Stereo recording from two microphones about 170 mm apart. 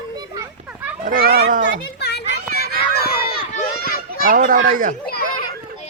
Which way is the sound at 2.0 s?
70° left (ahead or behind).